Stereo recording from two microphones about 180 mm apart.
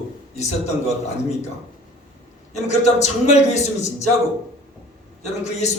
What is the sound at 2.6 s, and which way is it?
Speech, 40° left (ahead or behind).